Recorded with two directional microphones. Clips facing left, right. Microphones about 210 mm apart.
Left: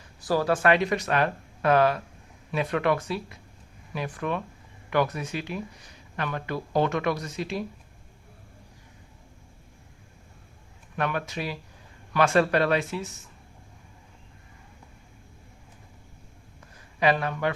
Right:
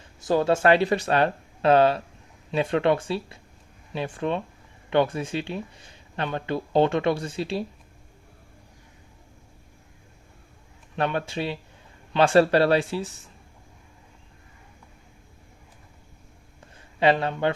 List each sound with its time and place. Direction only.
0.2 s speech: 20° right (ahead or behind)
10.9 s speech: 30° right (ahead or behind)
16.6 s a sound: 30° right (ahead or behind)